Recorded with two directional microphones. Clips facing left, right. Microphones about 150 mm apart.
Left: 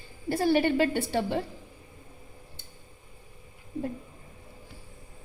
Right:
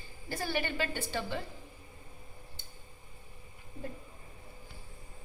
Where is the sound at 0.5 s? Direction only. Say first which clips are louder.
Left 10 dB; 60° left (ahead or behind).